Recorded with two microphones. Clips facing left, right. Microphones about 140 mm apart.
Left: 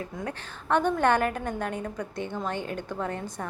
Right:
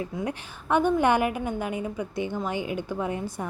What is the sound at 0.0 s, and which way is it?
A woman's voice, 10° right (ahead or behind).